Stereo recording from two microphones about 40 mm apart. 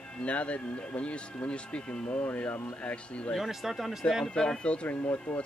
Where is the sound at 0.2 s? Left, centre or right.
Left.